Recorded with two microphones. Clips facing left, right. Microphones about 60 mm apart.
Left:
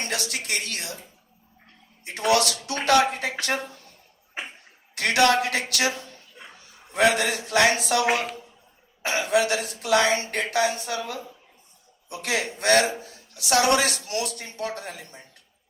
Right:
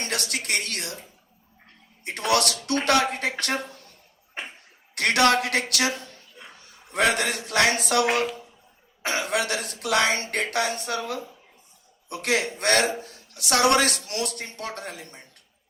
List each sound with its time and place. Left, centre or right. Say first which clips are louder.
0.0 s speech: even; right
2.3 s speech: even; right
4.4 s a sound: left 1 dB; centre
4.9 s speech: even; right
6.9 s speech: left 2 dB; right
9.0 s speech: left 3 dB; right